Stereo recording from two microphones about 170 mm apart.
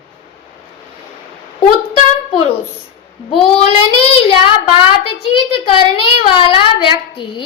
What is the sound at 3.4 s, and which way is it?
A child's voice, 35° left (ahead or behind).